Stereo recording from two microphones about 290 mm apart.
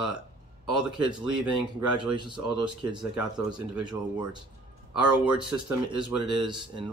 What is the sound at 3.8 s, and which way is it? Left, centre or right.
Speech, centre.